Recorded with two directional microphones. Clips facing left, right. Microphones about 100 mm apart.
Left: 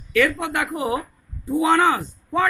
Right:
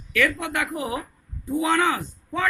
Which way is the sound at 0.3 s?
25° left (ahead or behind).